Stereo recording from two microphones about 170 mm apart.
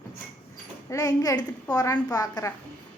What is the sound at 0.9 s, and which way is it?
A woman's voice, 20° left (ahead or behind).